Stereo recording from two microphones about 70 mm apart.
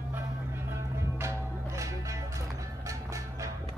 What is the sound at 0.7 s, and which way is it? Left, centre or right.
Music, right.